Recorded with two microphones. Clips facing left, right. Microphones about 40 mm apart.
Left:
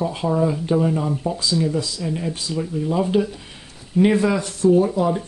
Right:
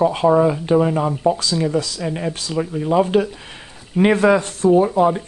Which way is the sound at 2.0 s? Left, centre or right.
Right.